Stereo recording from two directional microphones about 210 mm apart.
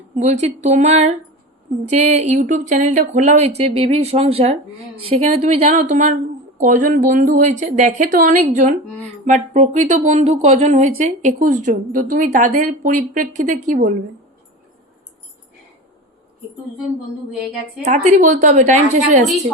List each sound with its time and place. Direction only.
0.2 s speech: 30° right (ahead or behind)
17.8 s speech: 35° right (ahead or behind)